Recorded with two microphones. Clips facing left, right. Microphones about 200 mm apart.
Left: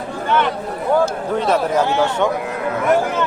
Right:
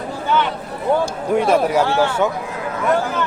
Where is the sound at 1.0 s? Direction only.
10° right (ahead or behind).